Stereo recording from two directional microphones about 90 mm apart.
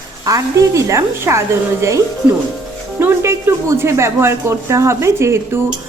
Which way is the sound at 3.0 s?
30° right (ahead or behind).